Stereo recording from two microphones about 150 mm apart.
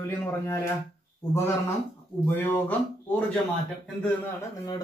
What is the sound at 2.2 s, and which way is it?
Speech, 10° left (ahead or behind).